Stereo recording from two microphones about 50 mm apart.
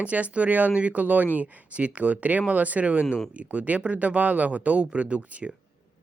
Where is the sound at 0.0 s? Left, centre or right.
Right.